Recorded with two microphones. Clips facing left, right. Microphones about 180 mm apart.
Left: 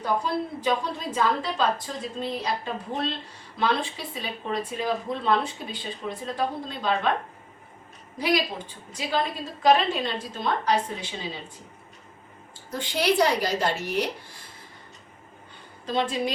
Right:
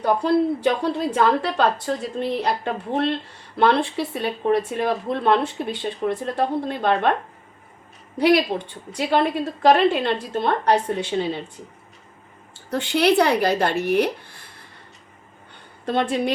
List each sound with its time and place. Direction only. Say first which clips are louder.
0.0 s speech: right 8 dB; 65° right (ahead or behind)
8.2 s speech: right 8 dB; 65° right (ahead or behind)
12.7 s speech: right 6 dB; 70° right (ahead or behind)
15.9 s speech: right 4 dB; 60° right (ahead or behind)